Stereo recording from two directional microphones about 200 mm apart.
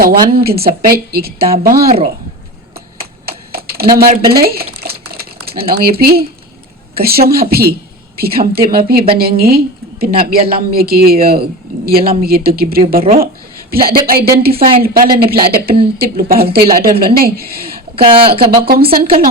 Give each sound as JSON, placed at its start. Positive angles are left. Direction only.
{"t": 0.3, "sound": "a woman's voice", "side_deg": -50}
{"t": 1.4, "sound": "a woman's voice", "side_deg": -40}
{"t": 3.2, "sound": "typing", "side_deg": -50}
{"t": 3.9, "sound": "a woman's voice", "side_deg": -45}
{"t": 17.9, "sound": "speech", "side_deg": -25}
{"t": 18.3, "sound": "a woman's voice", "side_deg": -50}